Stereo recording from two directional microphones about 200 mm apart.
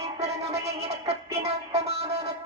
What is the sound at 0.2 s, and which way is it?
Music, 30° right (ahead or behind).